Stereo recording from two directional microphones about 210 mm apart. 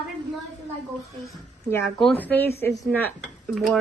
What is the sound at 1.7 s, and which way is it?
A woman's voice, 5° left (ahead or behind).